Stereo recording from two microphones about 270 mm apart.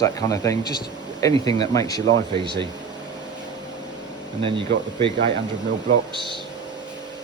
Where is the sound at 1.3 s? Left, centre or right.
Centre.